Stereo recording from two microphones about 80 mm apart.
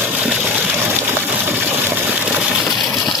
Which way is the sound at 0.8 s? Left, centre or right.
Right.